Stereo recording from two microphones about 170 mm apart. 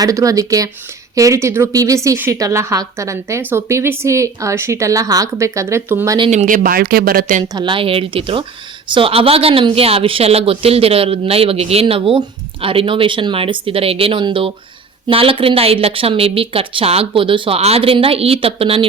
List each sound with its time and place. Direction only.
0.0 s speech: 20° right (ahead or behind)
6.3 s speech: 50° right (ahead or behind)
7.4 s speech: 25° right (ahead or behind)